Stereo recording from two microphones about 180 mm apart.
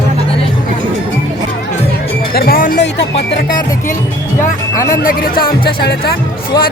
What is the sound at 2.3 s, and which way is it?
Speech, 55° left (ahead or behind).